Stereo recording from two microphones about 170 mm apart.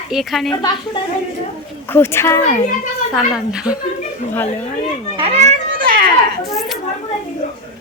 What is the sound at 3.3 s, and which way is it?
Speech, 5° right (ahead or behind).